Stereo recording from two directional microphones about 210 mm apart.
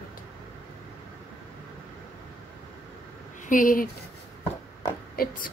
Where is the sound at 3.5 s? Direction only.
40° left (ahead or behind).